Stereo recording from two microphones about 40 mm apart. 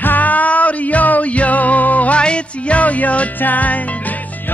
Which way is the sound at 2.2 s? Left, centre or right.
Left.